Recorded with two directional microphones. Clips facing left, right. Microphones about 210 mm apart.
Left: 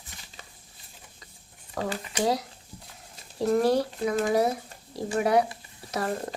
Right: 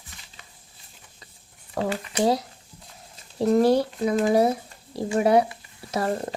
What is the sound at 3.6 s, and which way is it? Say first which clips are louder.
A woman's voice: right 4 dB; 30° right (ahead or behind).